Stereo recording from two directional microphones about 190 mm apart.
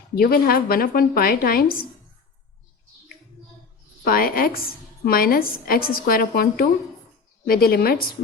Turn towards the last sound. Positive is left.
turn(degrees=50)  # may be behind; listen again after turning